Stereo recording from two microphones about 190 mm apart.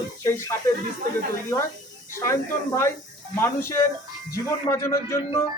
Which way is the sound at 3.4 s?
15° left (ahead or behind).